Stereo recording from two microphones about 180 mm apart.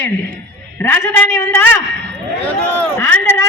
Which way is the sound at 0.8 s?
10° left (ahead or behind).